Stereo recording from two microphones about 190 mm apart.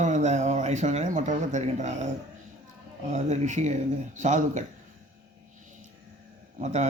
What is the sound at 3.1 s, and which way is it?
A man's voice, 40° right (ahead or behind).